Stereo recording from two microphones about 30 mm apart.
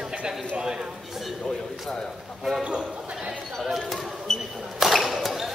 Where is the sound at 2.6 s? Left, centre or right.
Right.